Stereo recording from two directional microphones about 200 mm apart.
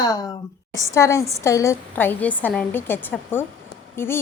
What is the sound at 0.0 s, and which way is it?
A woman's voice, 20° left (ahead or behind).